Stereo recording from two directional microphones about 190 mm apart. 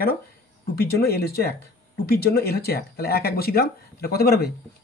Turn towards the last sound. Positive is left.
turn(degrees=55)  # may be behind; listen again after turning